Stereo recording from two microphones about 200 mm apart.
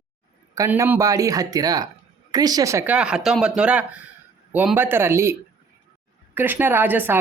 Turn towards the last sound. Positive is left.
turn(degrees=-10)  # may be behind; listen again after turning